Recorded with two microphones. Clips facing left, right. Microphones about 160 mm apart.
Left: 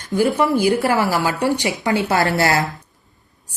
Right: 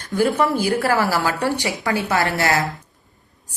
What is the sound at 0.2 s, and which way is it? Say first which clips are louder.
A woman's voice: left 2 dB; 15° left (ahead or behind).